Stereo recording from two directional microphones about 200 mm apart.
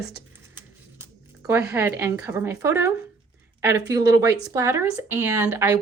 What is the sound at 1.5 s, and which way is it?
Speech, 10° right (ahead or behind).